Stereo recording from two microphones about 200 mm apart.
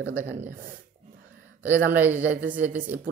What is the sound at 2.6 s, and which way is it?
Speech, 10° right (ahead or behind).